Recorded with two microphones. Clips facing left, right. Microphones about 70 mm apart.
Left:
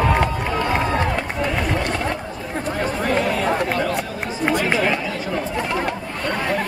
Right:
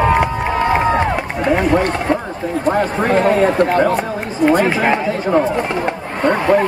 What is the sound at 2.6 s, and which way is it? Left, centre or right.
Speech, right.